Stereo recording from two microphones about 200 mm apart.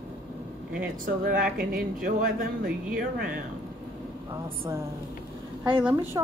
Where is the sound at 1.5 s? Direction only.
45° right (ahead or behind).